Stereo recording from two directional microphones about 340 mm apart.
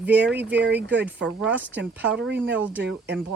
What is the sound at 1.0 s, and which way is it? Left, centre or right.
Speech, centre.